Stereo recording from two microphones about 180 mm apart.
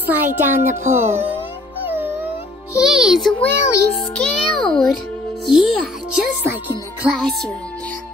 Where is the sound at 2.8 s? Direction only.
5° right (ahead or behind); by 3.9 s 15° left (ahead or behind).